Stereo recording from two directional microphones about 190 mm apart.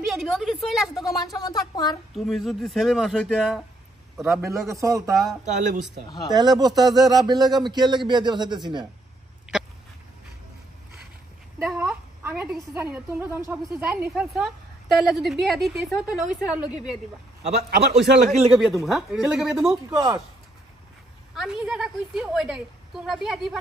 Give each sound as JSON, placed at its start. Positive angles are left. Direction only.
{"t": 0.1, "sound": "a woman's voice", "side_deg": 0}
{"t": 1.0, "sound": "speech", "side_deg": 20}
{"t": 2.1, "sound": "a woman's voice", "side_deg": 0}
{"t": 4.5, "sound": "a woman's voice", "side_deg": -15}
{"t": 5.4, "sound": "speech", "side_deg": -40}
{"t": 6.0, "sound": "speech", "side_deg": 20}
{"t": 6.3, "sound": "speech", "side_deg": -20}
{"t": 11.6, "sound": "a woman's voice", "side_deg": -5}
{"t": 17.6, "sound": "a man's voice", "side_deg": -60}
{"t": 18.5, "sound": "a woman's voice", "side_deg": 0}
{"t": 21.4, "sound": "a woman's voice", "side_deg": 0}